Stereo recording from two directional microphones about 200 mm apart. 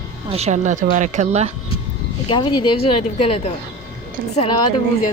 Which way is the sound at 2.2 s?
25° left (ahead or behind).